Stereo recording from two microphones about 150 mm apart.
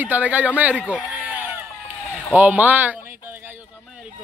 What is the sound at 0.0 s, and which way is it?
A man's voice, 10° right (ahead or behind).